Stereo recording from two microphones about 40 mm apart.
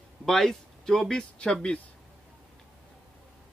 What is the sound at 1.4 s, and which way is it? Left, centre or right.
Speech, left.